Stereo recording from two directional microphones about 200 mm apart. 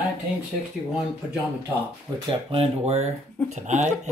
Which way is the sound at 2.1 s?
15° right (ahead or behind).